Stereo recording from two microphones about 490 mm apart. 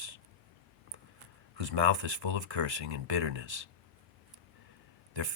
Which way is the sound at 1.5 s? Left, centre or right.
Right.